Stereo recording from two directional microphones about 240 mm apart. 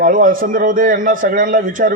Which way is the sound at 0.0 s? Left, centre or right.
Right.